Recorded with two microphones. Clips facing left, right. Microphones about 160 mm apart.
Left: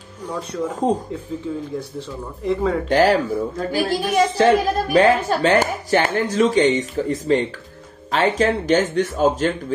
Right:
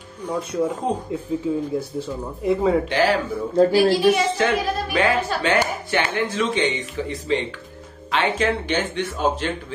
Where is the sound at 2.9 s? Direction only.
45° left (ahead or behind).